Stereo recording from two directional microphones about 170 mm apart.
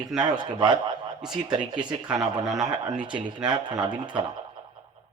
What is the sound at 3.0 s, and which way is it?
Speech, 30° right (ahead or behind).